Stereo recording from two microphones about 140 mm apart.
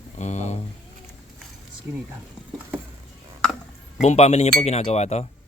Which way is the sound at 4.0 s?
50° left (ahead or behind).